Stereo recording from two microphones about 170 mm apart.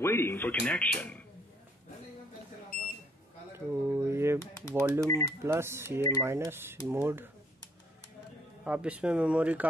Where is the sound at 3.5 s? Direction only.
15° right (ahead or behind).